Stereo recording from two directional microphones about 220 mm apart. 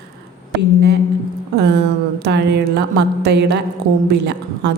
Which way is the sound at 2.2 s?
50° right (ahead or behind).